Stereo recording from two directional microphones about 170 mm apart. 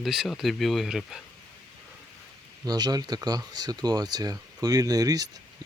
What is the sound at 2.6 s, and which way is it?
Speech, 25° right (ahead or behind).